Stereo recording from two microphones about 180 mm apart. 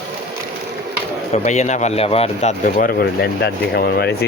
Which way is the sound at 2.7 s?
55° left (ahead or behind).